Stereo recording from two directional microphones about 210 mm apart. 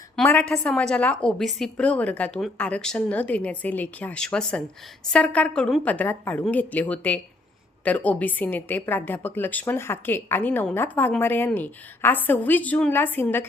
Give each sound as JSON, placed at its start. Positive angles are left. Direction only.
{"t": 0.2, "sound": "a woman's voice", "side_deg": 5}